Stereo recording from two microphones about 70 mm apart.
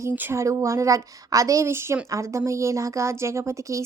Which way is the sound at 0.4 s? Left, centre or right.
Right.